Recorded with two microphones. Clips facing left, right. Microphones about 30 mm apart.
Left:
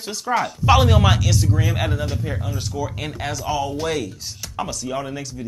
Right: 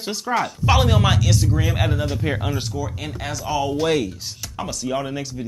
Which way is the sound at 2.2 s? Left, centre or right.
Right.